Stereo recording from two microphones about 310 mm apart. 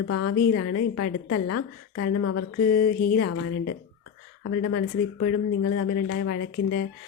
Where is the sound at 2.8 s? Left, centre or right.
Left.